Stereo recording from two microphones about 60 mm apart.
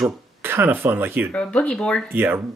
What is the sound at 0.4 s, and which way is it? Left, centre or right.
Speech, right.